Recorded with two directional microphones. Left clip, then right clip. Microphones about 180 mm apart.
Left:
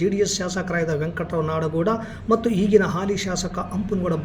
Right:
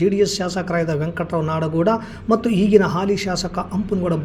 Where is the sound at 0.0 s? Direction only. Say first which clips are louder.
Right 4 dB; 25° right (ahead or behind).